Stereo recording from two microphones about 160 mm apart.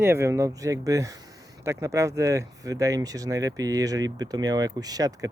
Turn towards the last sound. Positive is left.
turn(degrees=-20)  # may be behind; listen again after turning